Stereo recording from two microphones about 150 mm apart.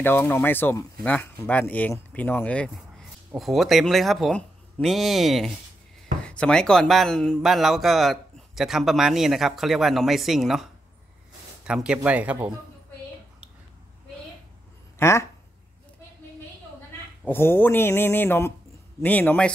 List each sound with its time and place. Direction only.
0.0 s speech: 15° left (ahead or behind); by 12.5 s 10° right (ahead or behind)
15.0 s speech: 20° left (ahead or behind)
17.2 s speech: 15° left (ahead or behind)